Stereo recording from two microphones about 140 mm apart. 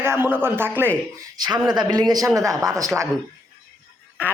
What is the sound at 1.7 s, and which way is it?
Speech, 30° right (ahead or behind).